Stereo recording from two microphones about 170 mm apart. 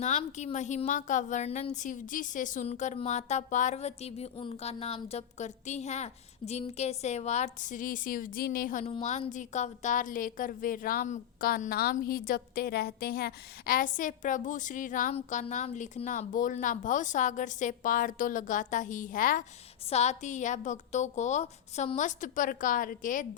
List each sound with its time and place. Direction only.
0.0 s a woman's voice: 45° left (ahead or behind)
8.8 s a woman's voice: 40° left (ahead or behind)
19.9 s a woman's voice: 40° left (ahead or behind)